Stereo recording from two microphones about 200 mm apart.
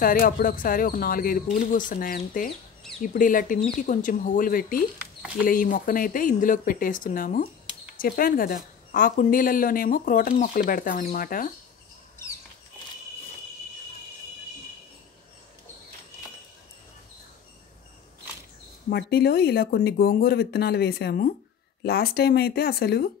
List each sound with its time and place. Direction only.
0.0 s a woman's voice: 45° left (ahead or behind)
18.9 s a woman's voice: 55° left (ahead or behind)